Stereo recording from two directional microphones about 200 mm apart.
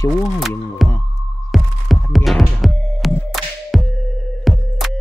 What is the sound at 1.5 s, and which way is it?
Throbbing, centre (ahead or behind).